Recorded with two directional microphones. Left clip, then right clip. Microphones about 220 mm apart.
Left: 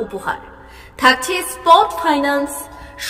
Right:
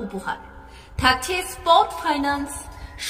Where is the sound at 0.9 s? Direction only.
15° left (ahead or behind).